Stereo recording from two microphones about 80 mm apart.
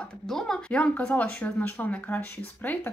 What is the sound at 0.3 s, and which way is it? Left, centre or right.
Speech, centre.